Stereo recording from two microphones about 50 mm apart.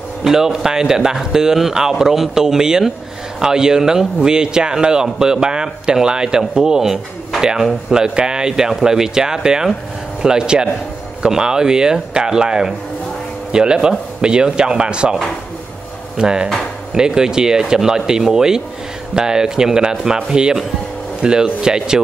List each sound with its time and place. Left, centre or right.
0.2 s a man's voice: centre
16.2 s a man's voice: centre